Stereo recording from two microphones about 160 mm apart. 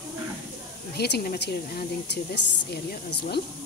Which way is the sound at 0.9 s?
85° left.